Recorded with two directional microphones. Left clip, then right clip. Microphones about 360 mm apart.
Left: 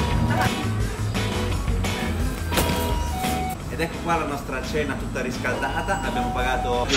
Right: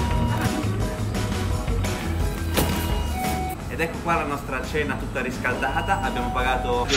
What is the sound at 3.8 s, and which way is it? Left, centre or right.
Speech, centre.